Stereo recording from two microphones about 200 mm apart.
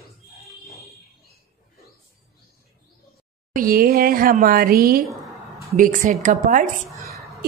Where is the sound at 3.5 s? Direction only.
45° right (ahead or behind).